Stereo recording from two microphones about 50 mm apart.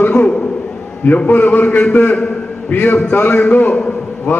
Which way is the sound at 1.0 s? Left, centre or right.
Left.